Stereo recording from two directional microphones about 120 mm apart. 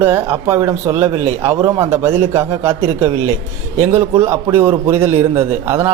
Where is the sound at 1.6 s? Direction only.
30° right (ahead or behind).